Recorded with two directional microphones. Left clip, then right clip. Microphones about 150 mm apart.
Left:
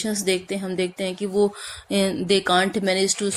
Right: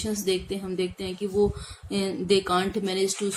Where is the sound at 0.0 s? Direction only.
35° left (ahead or behind).